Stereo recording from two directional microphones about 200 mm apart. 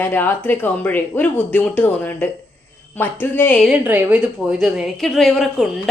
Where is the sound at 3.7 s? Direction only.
10° right (ahead or behind).